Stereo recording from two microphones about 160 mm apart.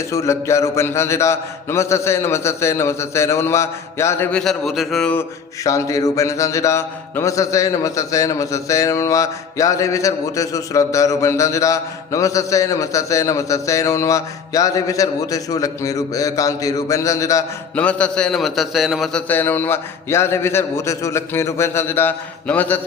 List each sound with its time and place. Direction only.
0.1 s a man's voice: 20° left (ahead or behind); by 5.1 s centre (ahead or behind)
5.6 s mantra: 20° left (ahead or behind)
17.7 s a man's voice: 5° left (ahead or behind)
19.3 s a man's voice: 10° left (ahead or behind)